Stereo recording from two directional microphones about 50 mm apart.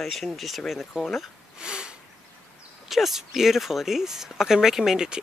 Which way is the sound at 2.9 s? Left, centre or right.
Centre.